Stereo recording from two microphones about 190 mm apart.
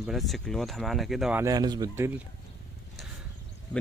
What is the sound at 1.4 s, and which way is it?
Speech, 20° right (ahead or behind).